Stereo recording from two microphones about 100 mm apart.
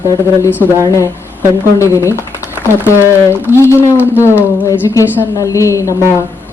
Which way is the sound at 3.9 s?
20° right (ahead or behind).